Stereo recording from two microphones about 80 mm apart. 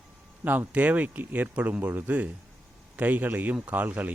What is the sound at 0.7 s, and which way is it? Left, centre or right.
Speech, centre.